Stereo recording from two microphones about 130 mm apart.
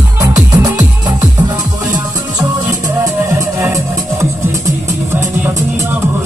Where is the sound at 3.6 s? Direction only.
20° right (ahead or behind).